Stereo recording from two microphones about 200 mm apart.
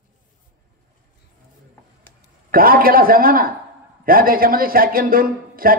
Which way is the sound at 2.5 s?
45° right (ahead or behind).